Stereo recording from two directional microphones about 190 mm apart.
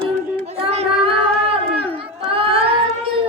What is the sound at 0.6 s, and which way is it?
Child singing, 30° right (ahead or behind).